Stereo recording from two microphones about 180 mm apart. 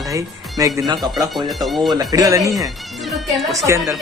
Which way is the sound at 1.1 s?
Centre (ahead or behind).